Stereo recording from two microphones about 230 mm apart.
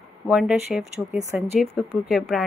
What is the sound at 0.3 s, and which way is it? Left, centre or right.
Speech, centre.